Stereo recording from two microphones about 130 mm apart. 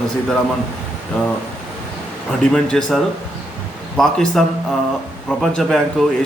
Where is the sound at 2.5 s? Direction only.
5° left (ahead or behind).